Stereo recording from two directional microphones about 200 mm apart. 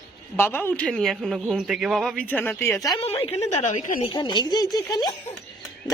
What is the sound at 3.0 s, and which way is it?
A woman's voice, 30° left (ahead or behind).